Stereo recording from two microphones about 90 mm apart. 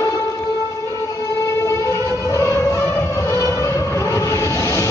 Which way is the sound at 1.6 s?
40° left (ahead or behind).